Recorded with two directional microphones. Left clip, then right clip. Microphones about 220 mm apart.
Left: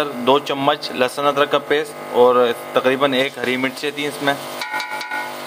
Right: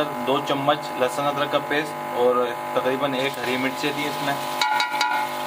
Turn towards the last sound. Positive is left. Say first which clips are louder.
# left 3 dB
turn(degrees=50)  # may be behind; listen again after turning